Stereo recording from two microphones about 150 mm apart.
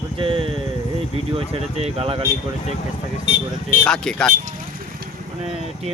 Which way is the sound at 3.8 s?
5° left (ahead or behind).